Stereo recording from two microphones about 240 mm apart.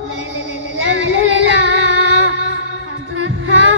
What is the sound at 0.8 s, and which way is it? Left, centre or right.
Child singing, right.